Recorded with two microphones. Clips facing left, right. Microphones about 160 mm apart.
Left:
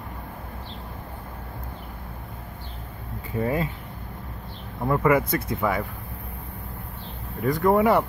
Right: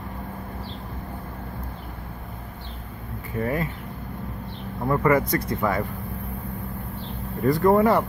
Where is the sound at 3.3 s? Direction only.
15° left (ahead or behind).